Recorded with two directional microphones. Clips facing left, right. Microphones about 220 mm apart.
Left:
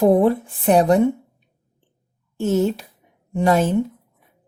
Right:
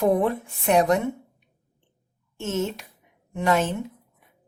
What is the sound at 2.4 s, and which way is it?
Speech, 35° left (ahead or behind).